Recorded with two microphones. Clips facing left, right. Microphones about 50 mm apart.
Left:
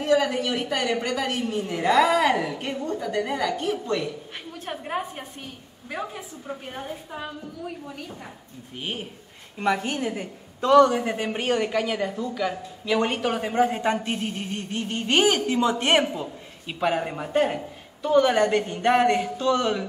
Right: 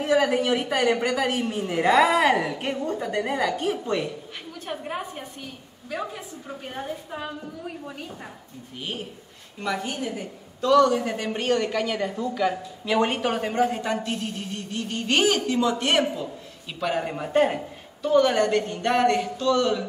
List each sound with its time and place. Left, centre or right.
0.0 s a woman's voice: centre
4.6 s speech: centre
6.4 s a woman's voice: centre
8.7 s a woman's voice: left
9.6 s a woman's voice: left
11.0 s speech: centre
13.6 s a woman's voice: centre
17.0 s speech: centre
18.0 s speech: centre